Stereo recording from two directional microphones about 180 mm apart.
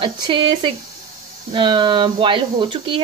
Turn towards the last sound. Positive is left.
turn(degrees=-25)  # may be behind; listen again after turning